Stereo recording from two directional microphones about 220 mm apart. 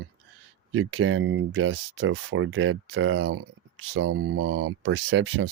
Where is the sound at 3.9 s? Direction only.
55° right (ahead or behind).